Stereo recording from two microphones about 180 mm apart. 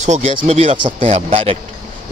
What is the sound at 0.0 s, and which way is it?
A man's voice, 40° right (ahead or behind).